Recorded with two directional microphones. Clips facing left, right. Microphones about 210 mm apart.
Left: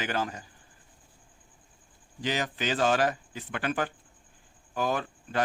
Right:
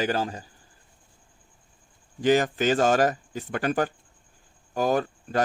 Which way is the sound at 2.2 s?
50° right (ahead or behind).